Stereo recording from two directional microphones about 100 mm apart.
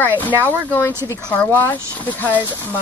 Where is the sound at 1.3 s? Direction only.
15° left (ahead or behind).